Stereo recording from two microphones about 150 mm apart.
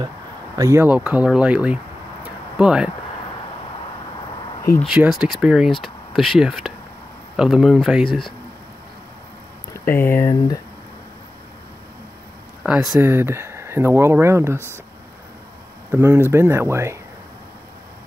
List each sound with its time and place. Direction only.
0.6 s speech: 20° right (ahead or behind)
0.8 s speech: 10° right (ahead or behind)
2.2 s a sound: 5° right (ahead or behind)
4.8 s speech: 5° right (ahead or behind)
9.8 s speech: 20° left (ahead or behind)
12.6 s speech: 10° right (ahead or behind)
15.9 s speech: 15° right (ahead or behind)